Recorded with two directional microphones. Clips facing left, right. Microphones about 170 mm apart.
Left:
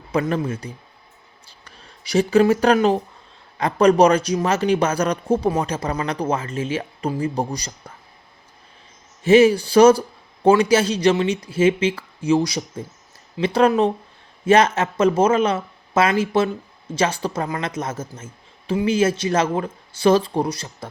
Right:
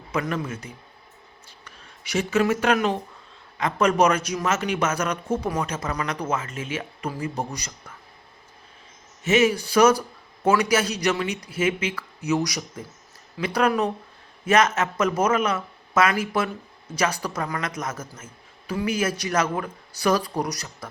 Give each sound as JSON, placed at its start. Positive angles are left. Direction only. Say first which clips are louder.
{"t": 0.1, "sound": "speech", "louder": "left 5 dB", "side_deg": 30}
{"t": 9.2, "sound": "speech", "louder": "left 7 dB", "side_deg": 30}